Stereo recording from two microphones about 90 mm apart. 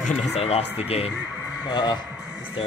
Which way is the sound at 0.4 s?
90° left.